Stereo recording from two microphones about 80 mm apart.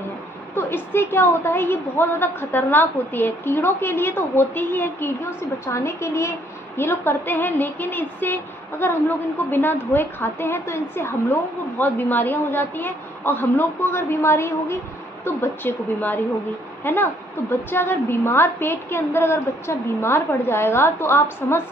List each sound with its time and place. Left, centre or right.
0.6 s a woman's voice: left
1.5 s a woman's voice: left